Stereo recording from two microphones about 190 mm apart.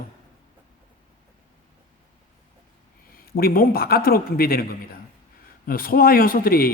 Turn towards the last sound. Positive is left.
turn(degrees=50)  # may be behind; listen again after turning